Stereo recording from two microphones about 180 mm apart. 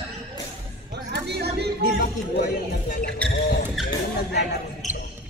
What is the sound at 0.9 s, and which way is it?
Music, 65° right (ahead or behind).